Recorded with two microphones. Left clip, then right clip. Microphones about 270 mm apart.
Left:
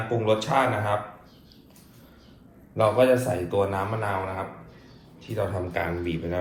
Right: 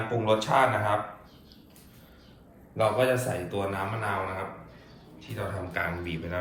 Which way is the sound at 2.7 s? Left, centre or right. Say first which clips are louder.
Left 5 dB; centre.